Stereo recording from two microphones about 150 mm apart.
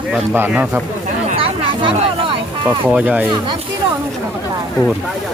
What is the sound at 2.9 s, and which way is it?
Speech, 10° right (ahead or behind).